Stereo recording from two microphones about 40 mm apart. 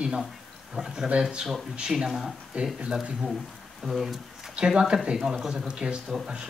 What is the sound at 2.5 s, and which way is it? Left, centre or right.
Speech, right.